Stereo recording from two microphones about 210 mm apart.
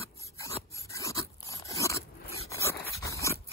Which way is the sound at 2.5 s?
15° left (ahead or behind).